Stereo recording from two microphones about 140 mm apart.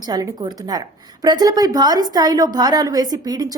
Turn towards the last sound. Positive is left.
turn(degrees=-25)  # may be behind; listen again after turning